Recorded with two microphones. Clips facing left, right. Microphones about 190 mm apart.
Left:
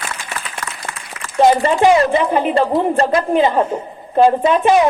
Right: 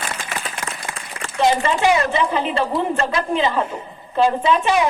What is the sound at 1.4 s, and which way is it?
A woman's voice, 45° left (ahead or behind).